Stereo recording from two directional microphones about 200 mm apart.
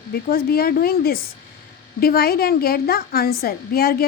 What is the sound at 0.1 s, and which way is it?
A woman's voice, 45° left (ahead or behind).